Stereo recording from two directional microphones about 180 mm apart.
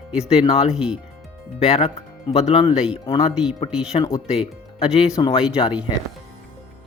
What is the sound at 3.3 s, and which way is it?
Speech, 5° right (ahead or behind).